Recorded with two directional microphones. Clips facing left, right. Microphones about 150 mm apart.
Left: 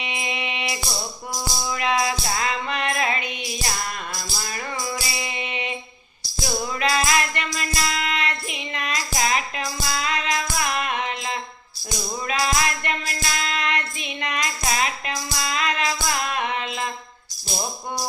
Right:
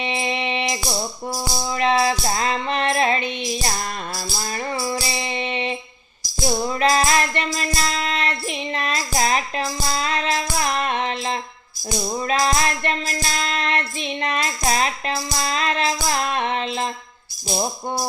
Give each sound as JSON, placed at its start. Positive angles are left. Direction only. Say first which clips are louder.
{"t": 0.0, "sound": "music", "louder": "right 6 dB", "side_deg": -35}
{"t": 4.8, "sound": "music", "louder": "right 4 dB", "side_deg": -35}